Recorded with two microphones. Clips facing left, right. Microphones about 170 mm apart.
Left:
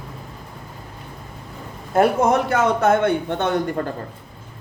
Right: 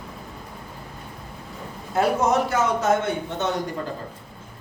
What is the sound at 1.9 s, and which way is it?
A man's voice, 60° left (ahead or behind).